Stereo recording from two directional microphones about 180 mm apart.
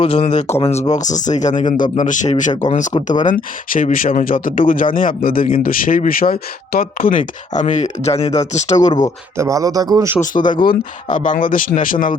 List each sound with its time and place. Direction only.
0.0 s speech: 35° left (ahead or behind)
9.4 s a man's voice: 20° right (ahead or behind)
10.3 s speech: 45° left (ahead or behind)